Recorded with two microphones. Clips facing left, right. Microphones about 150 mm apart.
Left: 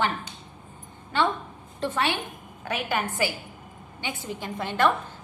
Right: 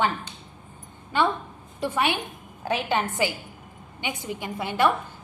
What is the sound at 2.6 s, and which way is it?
A woman's voice, 25° right (ahead or behind).